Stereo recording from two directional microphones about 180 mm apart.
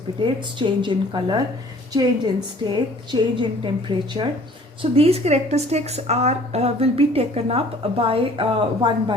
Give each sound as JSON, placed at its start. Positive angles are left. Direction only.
{"t": 0.6, "sound": "a woman's voice", "side_deg": -25}